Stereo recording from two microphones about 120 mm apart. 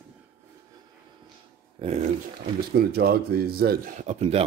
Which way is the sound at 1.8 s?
50° right (ahead or behind).